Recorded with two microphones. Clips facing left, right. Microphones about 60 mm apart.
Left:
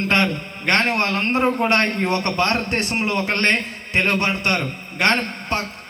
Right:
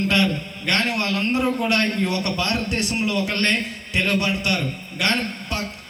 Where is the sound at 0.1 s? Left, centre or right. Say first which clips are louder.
Left 1 dB; left.